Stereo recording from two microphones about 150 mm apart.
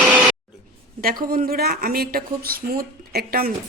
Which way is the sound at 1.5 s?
90° right.